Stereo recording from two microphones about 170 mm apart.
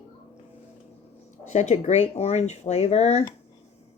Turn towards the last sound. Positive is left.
turn(degrees=40)  # may be behind; listen again after turning